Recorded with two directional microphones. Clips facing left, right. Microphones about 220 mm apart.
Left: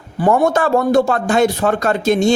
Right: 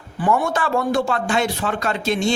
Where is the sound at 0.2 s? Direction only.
40° left (ahead or behind).